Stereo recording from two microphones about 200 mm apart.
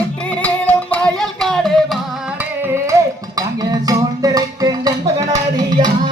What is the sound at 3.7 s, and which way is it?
Music, 20° right (ahead or behind).